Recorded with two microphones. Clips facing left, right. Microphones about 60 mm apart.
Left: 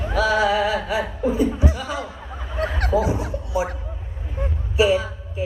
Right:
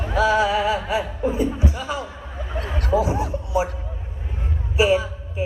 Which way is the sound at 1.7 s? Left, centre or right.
Right.